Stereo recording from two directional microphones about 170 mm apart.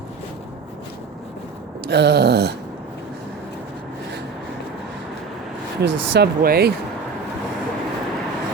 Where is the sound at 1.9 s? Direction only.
80° right.